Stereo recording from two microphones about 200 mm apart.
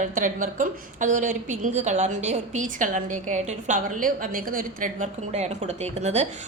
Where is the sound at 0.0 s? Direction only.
40° right (ahead or behind).